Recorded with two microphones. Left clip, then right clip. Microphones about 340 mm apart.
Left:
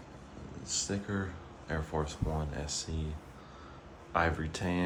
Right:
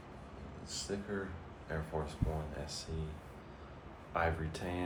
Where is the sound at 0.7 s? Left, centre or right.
Left.